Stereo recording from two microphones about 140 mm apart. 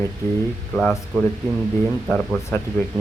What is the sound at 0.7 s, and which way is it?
Speech, 5° left (ahead or behind).